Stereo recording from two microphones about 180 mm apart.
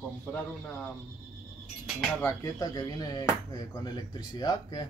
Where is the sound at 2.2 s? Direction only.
20° left (ahead or behind).